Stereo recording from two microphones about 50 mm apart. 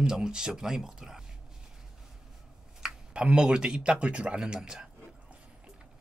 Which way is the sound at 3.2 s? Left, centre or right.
Centre.